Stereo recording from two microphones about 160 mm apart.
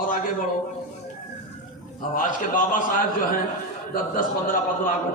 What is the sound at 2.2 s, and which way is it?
Speech, 55° left (ahead or behind).